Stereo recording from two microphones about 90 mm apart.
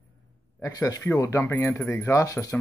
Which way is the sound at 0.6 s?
40° left (ahead or behind).